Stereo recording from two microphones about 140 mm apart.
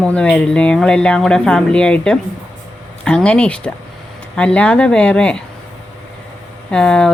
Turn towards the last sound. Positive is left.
turn(degrees=5)  # may be behind; listen again after turning